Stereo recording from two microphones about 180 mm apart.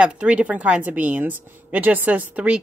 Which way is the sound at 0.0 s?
5° right (ahead or behind).